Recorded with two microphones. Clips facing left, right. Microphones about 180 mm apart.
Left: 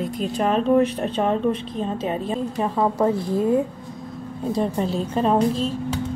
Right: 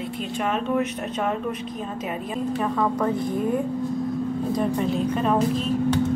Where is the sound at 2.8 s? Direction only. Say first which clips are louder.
Left 5 dB; 30° left (ahead or behind).